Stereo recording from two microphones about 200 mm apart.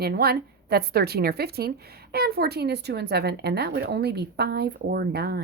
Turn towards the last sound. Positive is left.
turn(degrees=-55)  # may be behind; listen again after turning